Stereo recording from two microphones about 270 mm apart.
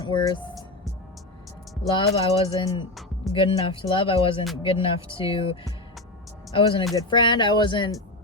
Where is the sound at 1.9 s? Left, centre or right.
Left.